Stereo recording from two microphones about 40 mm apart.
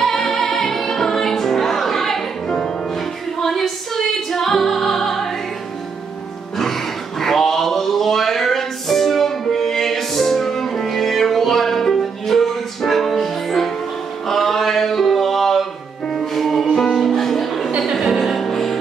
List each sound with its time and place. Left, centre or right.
0.0 s music: centre
2.4 s music: centre
3.3 s music: centre
6.5 s a sound: centre
14.2 s music: centre
17.6 s music: centre
17.9 s music: centre